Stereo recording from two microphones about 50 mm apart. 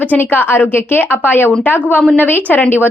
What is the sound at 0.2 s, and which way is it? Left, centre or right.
A woman's voice, left.